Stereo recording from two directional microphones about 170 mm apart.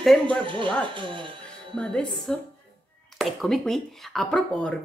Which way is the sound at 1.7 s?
5° left (ahead or behind).